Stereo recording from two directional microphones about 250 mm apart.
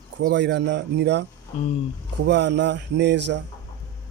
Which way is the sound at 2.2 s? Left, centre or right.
Right.